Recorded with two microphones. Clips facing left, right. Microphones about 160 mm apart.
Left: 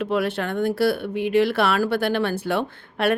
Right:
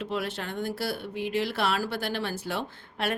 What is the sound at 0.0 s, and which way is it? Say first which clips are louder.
A woman's voice: left 9 dB; 60° left (ahead or behind).